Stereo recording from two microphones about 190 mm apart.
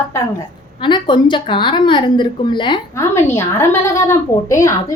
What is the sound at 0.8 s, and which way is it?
A woman's voice, 25° left (ahead or behind).